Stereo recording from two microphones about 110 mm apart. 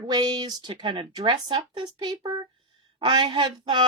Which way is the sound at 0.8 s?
50° right (ahead or behind).